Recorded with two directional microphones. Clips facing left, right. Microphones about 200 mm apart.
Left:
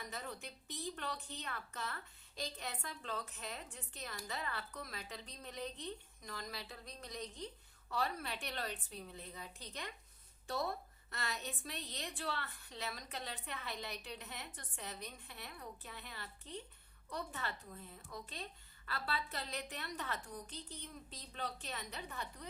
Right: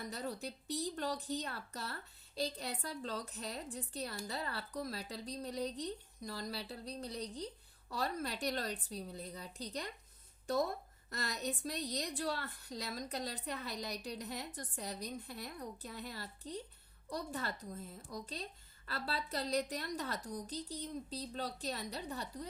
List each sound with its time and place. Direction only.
0.1 s speech: 35° right (ahead or behind)